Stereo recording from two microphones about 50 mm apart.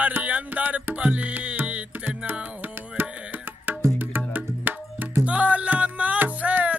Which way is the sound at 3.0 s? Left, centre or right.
Right.